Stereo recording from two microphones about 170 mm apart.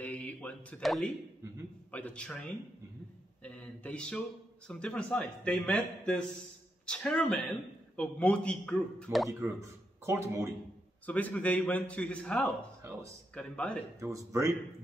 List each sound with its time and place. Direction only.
0.0 s a sound: 10° left (ahead or behind)
1.9 s a man's voice: 10° left (ahead or behind)
9.4 s a man's voice: 15° right (ahead or behind)
11.1 s a man's voice: 10° left (ahead or behind)
12.8 s a sound: 15° right (ahead or behind)
13.3 s a man's voice: 5° left (ahead or behind)
13.9 s speech: 15° right (ahead or behind)